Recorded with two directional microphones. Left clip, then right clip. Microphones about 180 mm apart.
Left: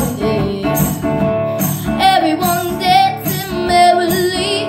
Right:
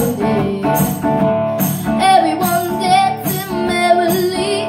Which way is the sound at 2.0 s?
15° left (ahead or behind).